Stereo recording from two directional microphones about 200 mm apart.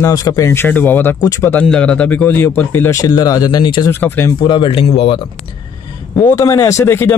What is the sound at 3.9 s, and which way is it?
Speech, 10° left (ahead or behind).